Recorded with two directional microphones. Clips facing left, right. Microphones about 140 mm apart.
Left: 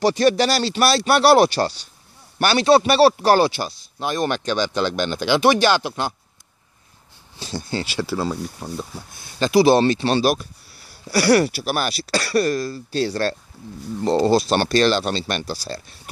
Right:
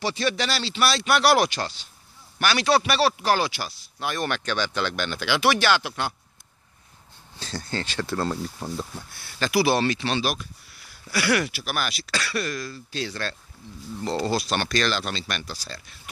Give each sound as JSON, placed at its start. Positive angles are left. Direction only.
{"t": 0.0, "sound": "a man's voice", "side_deg": 40}
{"t": 7.3, "sound": "speech", "side_deg": 15}